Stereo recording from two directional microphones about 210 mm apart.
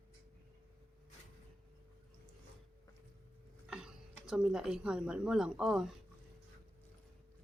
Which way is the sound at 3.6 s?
5° right (ahead or behind).